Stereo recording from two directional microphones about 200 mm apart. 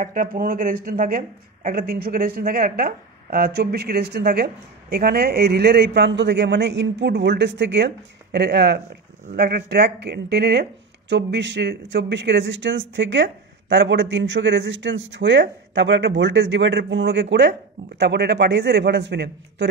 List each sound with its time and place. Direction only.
0.0 s speech: 40° right (ahead or behind); by 19.7 s 60° right (ahead or behind)